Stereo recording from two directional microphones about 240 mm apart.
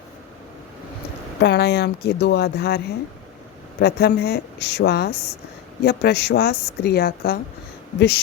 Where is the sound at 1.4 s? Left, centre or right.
Left.